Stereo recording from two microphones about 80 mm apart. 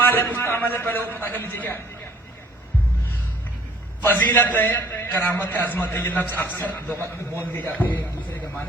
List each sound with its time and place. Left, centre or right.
0.1 s a man's voice: left
4.0 s a man's voice: left